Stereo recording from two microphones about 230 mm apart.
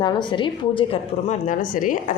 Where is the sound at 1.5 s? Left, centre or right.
Left.